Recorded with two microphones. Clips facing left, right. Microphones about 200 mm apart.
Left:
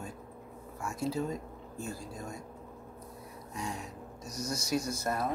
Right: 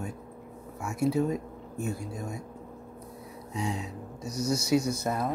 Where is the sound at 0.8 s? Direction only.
65° right (ahead or behind).